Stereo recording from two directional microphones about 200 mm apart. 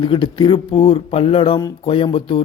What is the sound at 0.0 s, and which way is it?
A man's voice, 25° left (ahead or behind).